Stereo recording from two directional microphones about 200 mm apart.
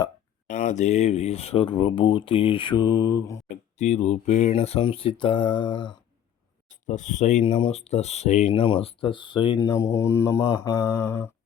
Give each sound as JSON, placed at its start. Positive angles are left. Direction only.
{"t": 0.4, "sound": "speech", "side_deg": 40}
{"t": 3.5, "sound": "speech", "side_deg": 35}
{"t": 6.7, "sound": "speech", "side_deg": 40}
{"t": 9.6, "sound": "mantra", "side_deg": 15}